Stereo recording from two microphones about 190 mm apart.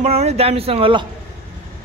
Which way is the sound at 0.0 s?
35° right (ahead or behind).